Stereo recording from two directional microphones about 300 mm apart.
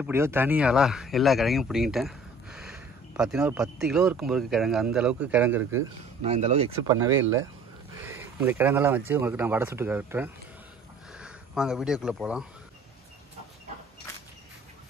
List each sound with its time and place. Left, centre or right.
0.0 s speech: centre
6.2 s speech: right
7.9 s a sound: centre
9.1 s speech: centre